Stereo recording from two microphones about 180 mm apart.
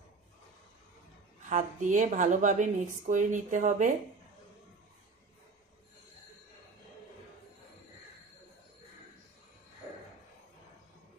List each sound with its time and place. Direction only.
1.4 s speech: 45° right (ahead or behind)